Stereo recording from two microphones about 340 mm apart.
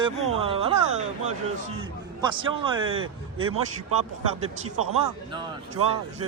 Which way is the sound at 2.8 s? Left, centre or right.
Right.